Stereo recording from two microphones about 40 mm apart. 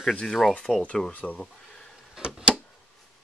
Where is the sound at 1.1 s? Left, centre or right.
Left.